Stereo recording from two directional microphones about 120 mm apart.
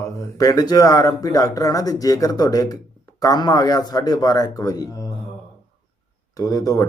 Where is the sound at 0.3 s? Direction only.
30° left (ahead or behind).